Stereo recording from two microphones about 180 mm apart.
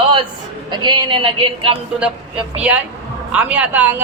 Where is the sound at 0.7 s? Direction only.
25° right (ahead or behind).